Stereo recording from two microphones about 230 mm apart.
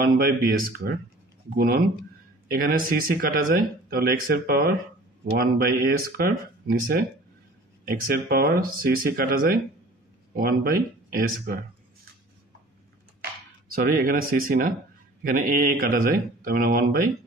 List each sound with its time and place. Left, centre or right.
0.0 s speech: right
2.5 s speech: right
13.7 s speech: right